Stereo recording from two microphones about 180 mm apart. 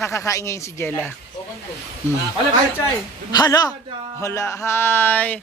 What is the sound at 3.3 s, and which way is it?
A man's voice, 20° left (ahead or behind).